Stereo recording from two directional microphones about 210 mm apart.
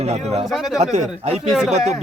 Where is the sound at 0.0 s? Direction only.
30° right (ahead or behind).